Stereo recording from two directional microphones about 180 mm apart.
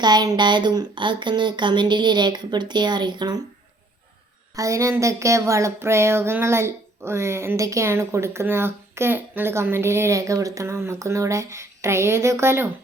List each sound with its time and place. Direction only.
0.0 s speech: 25° right (ahead or behind)
4.5 s speech: 15° right (ahead or behind)